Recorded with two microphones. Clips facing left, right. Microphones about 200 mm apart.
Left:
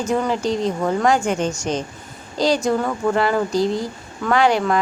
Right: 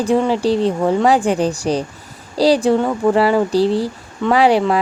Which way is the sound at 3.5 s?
35° right (ahead or behind).